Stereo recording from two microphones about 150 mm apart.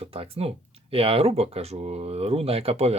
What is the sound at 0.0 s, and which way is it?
Speech, 40° right (ahead or behind).